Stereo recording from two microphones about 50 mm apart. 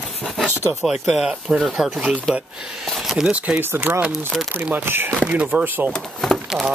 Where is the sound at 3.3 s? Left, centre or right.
Right.